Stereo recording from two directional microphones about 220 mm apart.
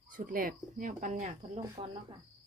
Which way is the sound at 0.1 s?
40° right (ahead or behind).